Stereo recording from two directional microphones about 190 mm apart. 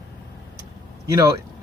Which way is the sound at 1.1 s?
20° right (ahead or behind).